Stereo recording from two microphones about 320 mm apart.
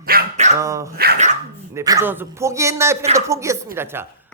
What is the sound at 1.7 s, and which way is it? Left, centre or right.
A man's voice, centre.